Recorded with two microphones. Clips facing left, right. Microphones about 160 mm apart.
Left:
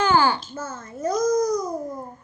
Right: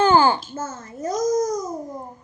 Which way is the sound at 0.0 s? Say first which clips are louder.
Right 3 dB; 25° right (ahead or behind).